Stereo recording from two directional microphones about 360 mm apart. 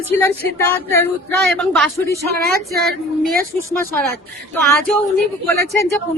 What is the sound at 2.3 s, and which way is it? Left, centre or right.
A woman's voice, right.